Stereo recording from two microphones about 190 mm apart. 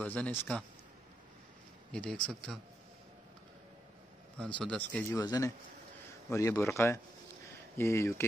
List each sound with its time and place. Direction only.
0.0 s speech: 10° left (ahead or behind)
1.9 s speech: 5° left (ahead or behind)
4.6 s speech: 5° left (ahead or behind)
5.2 s speech: 20° left (ahead or behind)